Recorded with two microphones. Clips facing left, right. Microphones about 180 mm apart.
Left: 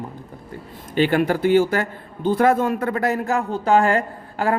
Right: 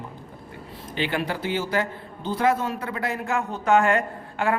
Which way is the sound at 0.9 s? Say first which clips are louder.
Left 9 dB; 50° left (ahead or behind).